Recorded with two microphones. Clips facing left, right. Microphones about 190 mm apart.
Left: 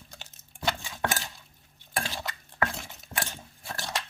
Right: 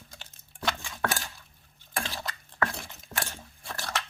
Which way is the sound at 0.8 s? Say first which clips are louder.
Even; 15° left (ahead or behind).